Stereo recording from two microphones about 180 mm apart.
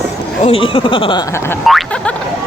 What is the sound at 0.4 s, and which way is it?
Speech, 30° left (ahead or behind).